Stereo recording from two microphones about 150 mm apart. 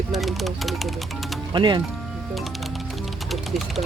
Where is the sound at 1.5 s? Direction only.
30° right (ahead or behind).